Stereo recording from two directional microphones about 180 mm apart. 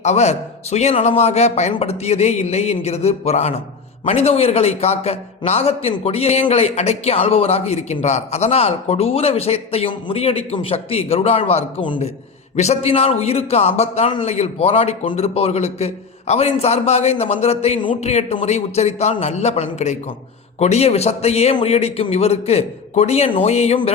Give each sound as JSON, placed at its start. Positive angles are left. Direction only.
{"t": 0.0, "sound": "a man's voice", "side_deg": 40}